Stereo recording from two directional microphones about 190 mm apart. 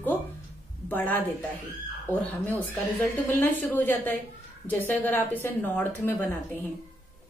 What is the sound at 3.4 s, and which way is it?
A woman's voice, 10° left (ahead or behind).